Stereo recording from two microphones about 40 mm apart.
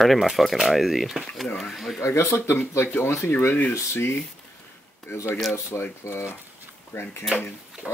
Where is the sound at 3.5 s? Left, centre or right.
Left.